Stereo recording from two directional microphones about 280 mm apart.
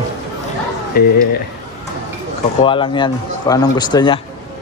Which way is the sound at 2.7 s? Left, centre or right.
Centre.